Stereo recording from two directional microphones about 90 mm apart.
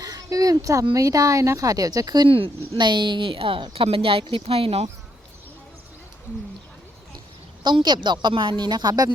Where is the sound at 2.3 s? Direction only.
90° right.